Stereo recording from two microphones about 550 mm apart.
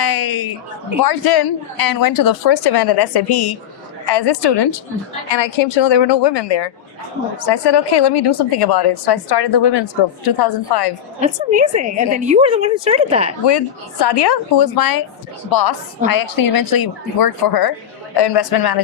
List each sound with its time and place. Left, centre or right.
0.0 s a sound: left
1.0 s a woman's voice: left
11.2 s a woman's voice: centre
13.4 s a woman's voice: left